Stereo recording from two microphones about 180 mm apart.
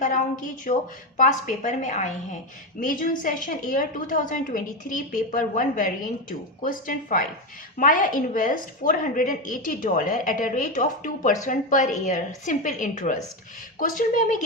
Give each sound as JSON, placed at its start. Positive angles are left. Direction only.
{"t": 0.0, "sound": "a woman's voice", "side_deg": 45}